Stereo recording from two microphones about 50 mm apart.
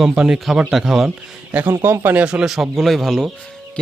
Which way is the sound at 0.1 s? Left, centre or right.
Centre.